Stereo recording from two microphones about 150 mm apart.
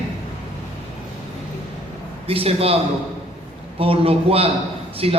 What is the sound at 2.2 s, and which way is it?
A man's voice, 40° right (ahead or behind).